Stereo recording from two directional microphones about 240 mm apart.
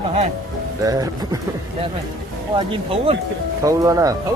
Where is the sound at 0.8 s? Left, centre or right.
Centre.